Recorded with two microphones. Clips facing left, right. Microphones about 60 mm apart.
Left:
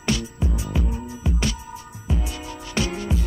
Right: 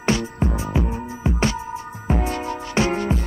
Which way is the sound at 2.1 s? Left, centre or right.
Right.